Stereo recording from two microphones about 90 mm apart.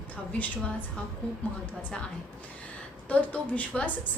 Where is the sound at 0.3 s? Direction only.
15° left (ahead or behind).